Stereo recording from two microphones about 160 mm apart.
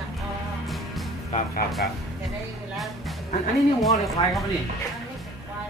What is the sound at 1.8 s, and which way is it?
Speech, 85° left.